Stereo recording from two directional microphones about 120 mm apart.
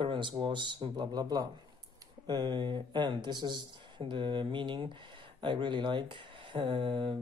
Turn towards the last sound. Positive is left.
turn(degrees=-45)  # may be behind; listen again after turning